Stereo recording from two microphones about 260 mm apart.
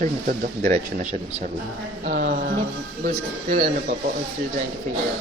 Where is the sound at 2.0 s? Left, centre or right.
Right.